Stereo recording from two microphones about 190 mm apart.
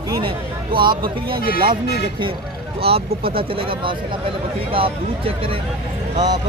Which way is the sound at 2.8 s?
30° right (ahead or behind).